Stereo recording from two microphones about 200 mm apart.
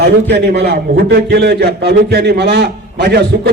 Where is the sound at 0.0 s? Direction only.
55° right (ahead or behind).